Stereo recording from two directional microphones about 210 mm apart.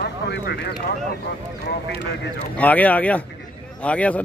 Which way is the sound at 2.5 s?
5° left (ahead or behind).